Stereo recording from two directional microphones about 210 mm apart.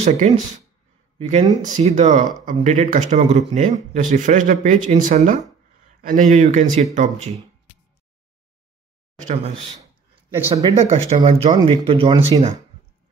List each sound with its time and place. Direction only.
0.0 s speech: 35° right (ahead or behind)
9.3 s speech: 30° right (ahead or behind)
10.3 s speech: 15° right (ahead or behind)
10.7 s speech: 35° right (ahead or behind)